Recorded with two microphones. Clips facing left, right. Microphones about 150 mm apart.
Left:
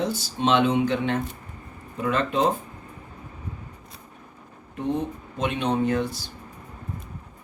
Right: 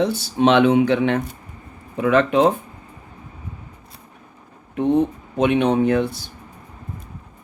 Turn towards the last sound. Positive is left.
turn(degrees=-60)  # may be behind; listen again after turning